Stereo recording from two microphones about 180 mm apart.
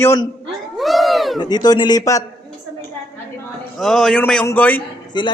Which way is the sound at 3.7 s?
Centre (ahead or behind).